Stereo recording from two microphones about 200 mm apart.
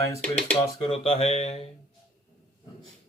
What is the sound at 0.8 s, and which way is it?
Speech, 30° left (ahead or behind).